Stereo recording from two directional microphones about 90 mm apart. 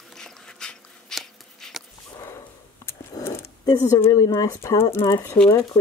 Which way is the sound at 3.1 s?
30° left (ahead or behind).